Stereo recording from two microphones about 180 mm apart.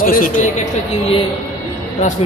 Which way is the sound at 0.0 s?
50° left (ahead or behind).